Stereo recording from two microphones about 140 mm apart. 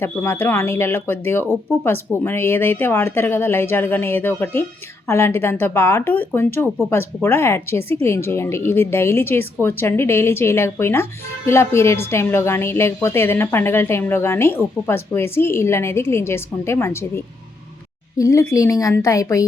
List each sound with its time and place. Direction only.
0.0 s a woman's voice: 15° left (ahead or behind)